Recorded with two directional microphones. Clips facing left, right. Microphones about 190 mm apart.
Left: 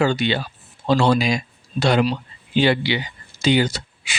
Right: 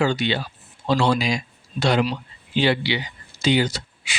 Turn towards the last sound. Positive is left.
turn(degrees=50)  # may be behind; listen again after turning